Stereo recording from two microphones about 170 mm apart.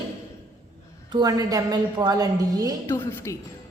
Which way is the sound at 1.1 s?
25° right (ahead or behind).